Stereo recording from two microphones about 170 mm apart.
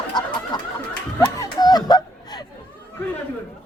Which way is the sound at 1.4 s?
25° left (ahead or behind).